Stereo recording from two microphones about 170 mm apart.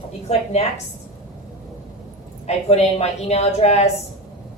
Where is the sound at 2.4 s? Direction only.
40° left (ahead or behind).